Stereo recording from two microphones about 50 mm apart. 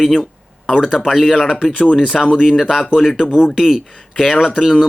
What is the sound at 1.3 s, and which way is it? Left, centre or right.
Speech, centre.